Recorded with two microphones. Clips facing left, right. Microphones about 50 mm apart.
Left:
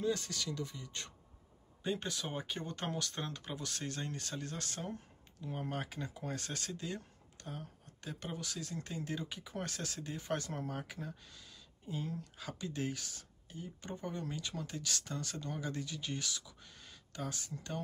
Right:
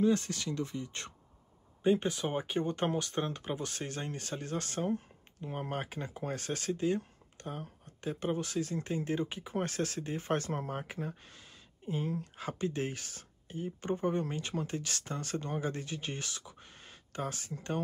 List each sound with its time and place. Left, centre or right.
0.1 s speech: right
1.8 s speech: right